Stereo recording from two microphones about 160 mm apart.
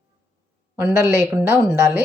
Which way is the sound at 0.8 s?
15° right (ahead or behind).